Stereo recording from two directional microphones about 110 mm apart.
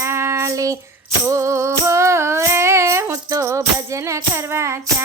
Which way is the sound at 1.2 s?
25° right (ahead or behind).